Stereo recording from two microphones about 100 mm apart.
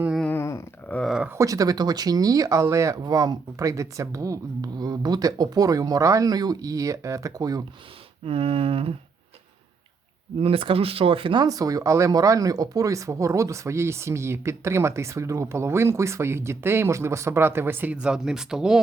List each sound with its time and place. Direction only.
0.3 s a sound: 25° left (ahead or behind)
1.3 s speech: 35° right (ahead or behind)
3.0 s speech: 40° right (ahead or behind)
8.2 s a sound: 75° right (ahead or behind)
10.4 s speech: 65° right (ahead or behind)
11.4 s speech: 35° right (ahead or behind); by 18.8 s 5° right (ahead or behind)